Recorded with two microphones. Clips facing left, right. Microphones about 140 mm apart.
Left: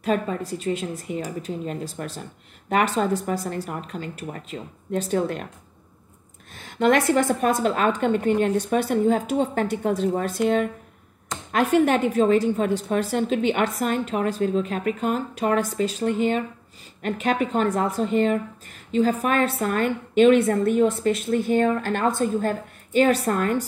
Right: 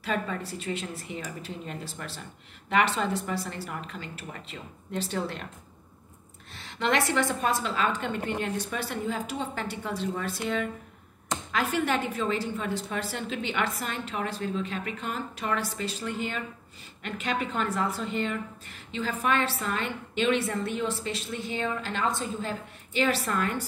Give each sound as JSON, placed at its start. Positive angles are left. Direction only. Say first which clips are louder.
{"t": 0.0, "sound": "a woman's voice", "louder": "left 7 dB", "side_deg": 45}
{"t": 6.5, "sound": "a woman's voice", "louder": "left 8 dB", "side_deg": 45}